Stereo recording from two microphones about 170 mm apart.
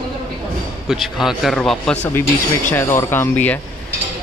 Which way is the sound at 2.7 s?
15° left (ahead or behind).